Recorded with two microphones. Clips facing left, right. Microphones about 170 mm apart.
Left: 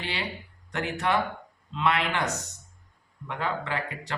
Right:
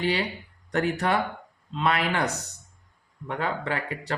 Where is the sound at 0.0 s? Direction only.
40° right (ahead or behind).